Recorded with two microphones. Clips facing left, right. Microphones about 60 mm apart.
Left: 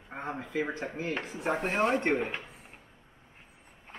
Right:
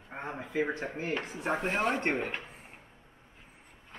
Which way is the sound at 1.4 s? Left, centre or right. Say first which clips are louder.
Left 2 dB; centre.